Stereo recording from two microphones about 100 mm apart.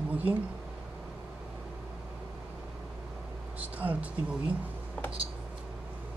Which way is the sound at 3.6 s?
15° right (ahead or behind).